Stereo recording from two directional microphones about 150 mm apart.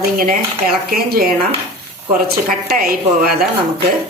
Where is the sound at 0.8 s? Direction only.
80° right.